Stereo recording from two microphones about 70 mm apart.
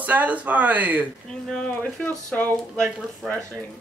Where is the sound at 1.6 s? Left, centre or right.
Left.